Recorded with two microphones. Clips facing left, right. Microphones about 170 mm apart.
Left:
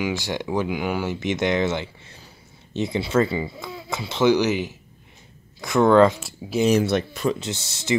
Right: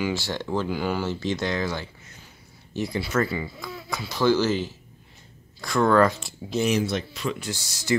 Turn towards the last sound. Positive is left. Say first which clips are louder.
# left 1 dB
turn(degrees=25)  # may be behind; listen again after turning